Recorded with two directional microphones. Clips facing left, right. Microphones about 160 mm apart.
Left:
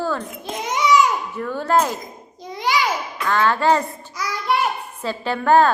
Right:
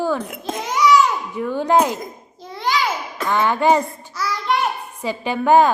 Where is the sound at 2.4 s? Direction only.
15° left (ahead or behind).